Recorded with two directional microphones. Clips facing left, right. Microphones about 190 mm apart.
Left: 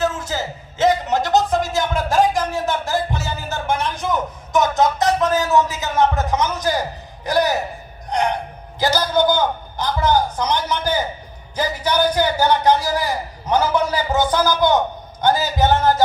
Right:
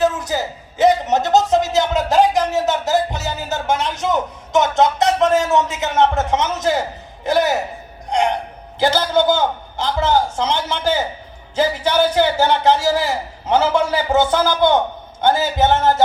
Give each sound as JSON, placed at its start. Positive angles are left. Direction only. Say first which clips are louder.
{"t": 0.0, "sound": "a sound", "louder": "right 4 dB", "side_deg": -20}
{"t": 7.3, "sound": "a man's voice", "louder": "right 2 dB", "side_deg": -20}
{"t": 8.1, "sound": "gasp", "louder": "right 2 dB", "side_deg": -20}
{"t": 8.8, "sound": "a man's voice", "louder": "right 2 dB", "side_deg": -25}